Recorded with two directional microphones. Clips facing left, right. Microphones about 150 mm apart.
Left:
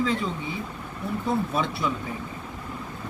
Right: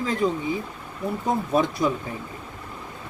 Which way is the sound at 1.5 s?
45° right (ahead or behind).